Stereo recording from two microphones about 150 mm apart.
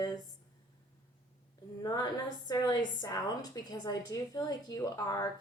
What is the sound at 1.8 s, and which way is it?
A woman's voice, 25° left (ahead or behind).